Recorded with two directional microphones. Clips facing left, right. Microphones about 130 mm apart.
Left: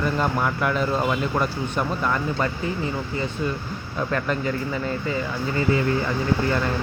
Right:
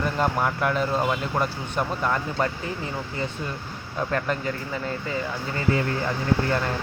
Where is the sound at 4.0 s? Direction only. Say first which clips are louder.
Left 1 dB; 45° right (ahead or behind).